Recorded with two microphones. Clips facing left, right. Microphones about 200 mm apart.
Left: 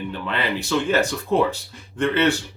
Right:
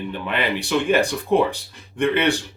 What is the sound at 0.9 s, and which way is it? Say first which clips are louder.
Speech: right 4 dB; 15° right (ahead or behind).